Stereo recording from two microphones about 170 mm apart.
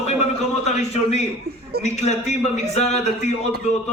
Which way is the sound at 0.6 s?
40° left (ahead or behind).